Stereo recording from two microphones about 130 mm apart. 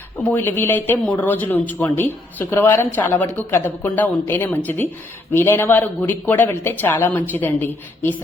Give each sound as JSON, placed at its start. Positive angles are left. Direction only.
{"t": 0.3, "sound": "speech", "side_deg": 15}